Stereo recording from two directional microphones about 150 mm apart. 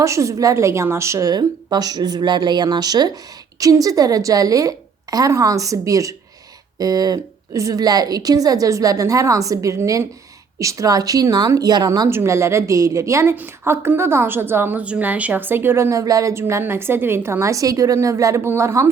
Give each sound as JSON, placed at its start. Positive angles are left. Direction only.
{"t": 0.0, "sound": "a woman's voice", "side_deg": -20}